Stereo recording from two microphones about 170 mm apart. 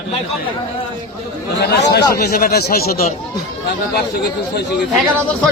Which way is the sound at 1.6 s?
80° left.